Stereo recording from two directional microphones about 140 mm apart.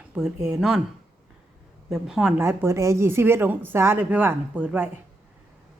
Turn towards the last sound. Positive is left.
turn(degrees=-10)  # may be behind; listen again after turning